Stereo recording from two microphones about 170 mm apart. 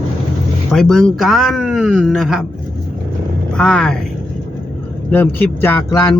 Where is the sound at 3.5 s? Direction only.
5° left (ahead or behind).